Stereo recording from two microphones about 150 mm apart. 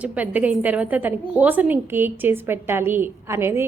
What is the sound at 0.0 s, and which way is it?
A woman's voice, 10° right (ahead or behind).